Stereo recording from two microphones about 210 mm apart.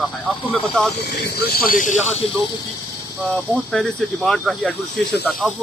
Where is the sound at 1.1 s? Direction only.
50° left (ahead or behind).